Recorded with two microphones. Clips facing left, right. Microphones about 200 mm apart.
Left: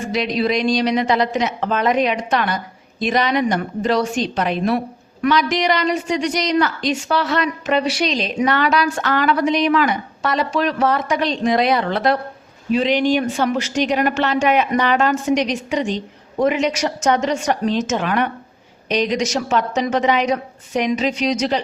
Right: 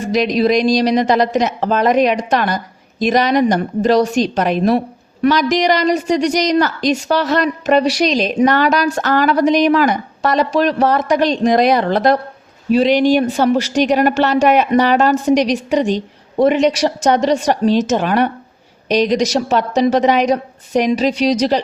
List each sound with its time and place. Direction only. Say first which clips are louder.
0.1 s a woman's voice: right 6 dB; 40° right (ahead or behind)